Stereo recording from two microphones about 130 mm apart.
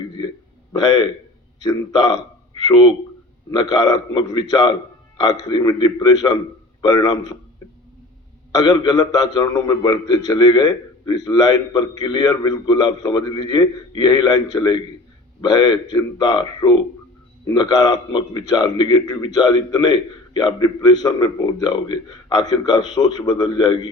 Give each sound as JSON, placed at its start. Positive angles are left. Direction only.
{"t": 0.7, "sound": "a man's voice", "side_deg": 35}
{"t": 8.5, "sound": "a man's voice", "side_deg": 30}